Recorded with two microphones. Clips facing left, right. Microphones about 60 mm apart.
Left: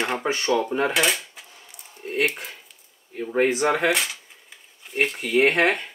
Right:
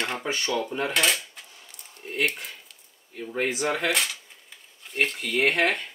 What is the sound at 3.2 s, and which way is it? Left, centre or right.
Speech, left.